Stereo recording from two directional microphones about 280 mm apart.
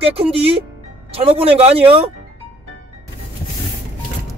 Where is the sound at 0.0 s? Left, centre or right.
Centre.